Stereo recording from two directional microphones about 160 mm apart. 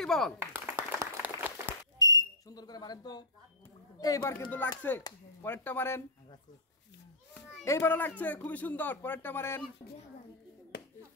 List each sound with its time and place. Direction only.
0.0 s speech: centre (ahead or behind)
0.5 s applause: 15° right (ahead or behind)
2.0 s whistle: 20° left (ahead or behind)
4.0 s speech: 20° left (ahead or behind)
7.6 s speech: 15° left (ahead or behind)
10.7 s chop: 90° left